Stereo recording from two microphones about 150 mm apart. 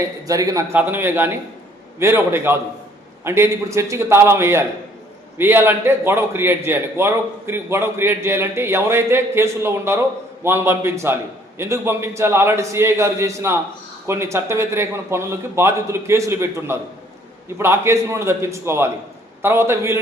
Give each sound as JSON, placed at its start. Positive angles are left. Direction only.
{"t": 0.3, "sound": "a man's voice", "side_deg": -20}